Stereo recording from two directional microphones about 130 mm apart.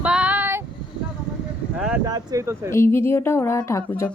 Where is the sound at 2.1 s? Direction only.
25° right (ahead or behind).